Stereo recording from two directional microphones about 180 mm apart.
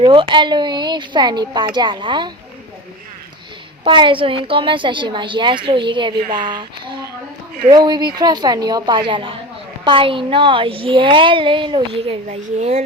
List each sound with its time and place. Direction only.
0.0 s a woman's voice: 30° right (ahead or behind)
3.8 s a woman's voice: 25° right (ahead or behind)